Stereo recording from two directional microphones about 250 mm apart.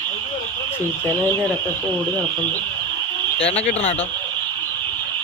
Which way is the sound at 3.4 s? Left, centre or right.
Left.